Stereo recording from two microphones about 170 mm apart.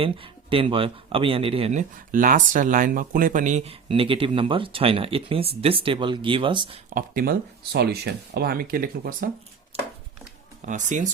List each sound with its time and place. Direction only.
0.0 s speech: 30° right (ahead or behind)
2.1 s speech: 50° right (ahead or behind); by 6.7 s 30° right (ahead or behind)
6.9 s speech: 55° right (ahead or behind)
9.7 s a sound: 35° right (ahead or behind)
10.7 s speech: 45° right (ahead or behind)